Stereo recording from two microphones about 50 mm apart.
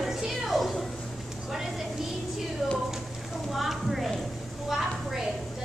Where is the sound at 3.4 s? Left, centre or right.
Centre.